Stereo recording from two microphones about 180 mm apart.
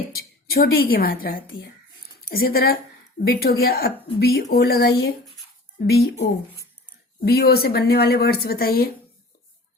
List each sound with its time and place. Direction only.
0.1 s a woman's voice: 60° left (ahead or behind)